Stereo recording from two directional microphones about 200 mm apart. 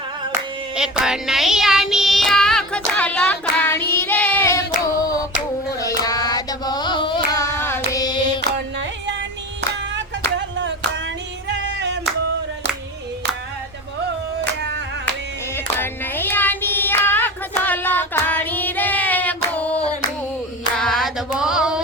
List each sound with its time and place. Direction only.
0.8 s child singing: 5° right (ahead or behind); by 5.2 s 15° left (ahead or behind)
5.8 s carnatic music: 20° left (ahead or behind)
9.9 s a sound: 65° right (ahead or behind)
11.4 s music: 60° right (ahead or behind)
15.5 s child singing: 10° left (ahead or behind)
20.7 s a sound: centre (ahead or behind)